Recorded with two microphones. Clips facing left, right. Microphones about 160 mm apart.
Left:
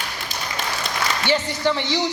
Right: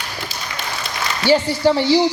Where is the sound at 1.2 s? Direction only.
35° right (ahead or behind).